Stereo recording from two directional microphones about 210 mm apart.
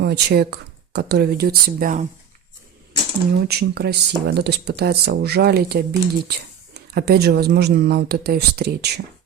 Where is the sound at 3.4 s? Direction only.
50° right (ahead or behind).